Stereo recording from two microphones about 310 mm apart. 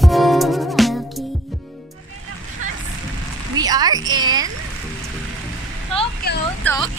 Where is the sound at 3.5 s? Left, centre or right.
Centre.